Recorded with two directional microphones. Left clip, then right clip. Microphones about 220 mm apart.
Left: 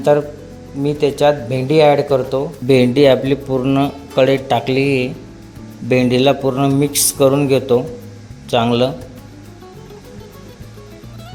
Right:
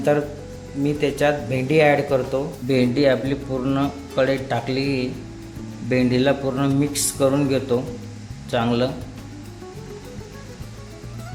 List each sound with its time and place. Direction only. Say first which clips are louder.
0.8 s a man's voice: left 6 dB; 20° left (ahead or behind)
2.6 s a man's voice: left 8 dB; 30° left (ahead or behind)